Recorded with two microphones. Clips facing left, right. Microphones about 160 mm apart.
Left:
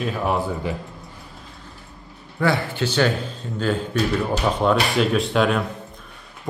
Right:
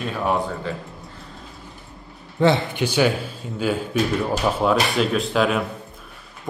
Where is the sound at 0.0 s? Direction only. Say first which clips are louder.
Even; centre (ahead or behind).